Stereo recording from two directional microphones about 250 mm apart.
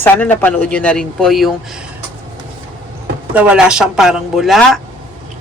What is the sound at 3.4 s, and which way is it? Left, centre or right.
Speech, centre.